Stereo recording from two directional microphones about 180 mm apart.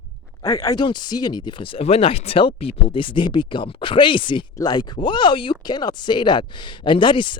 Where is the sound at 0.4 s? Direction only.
20° left (ahead or behind).